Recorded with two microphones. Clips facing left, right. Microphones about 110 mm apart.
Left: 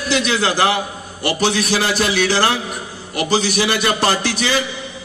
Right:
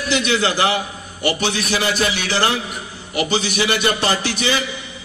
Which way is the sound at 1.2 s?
40° left (ahead or behind).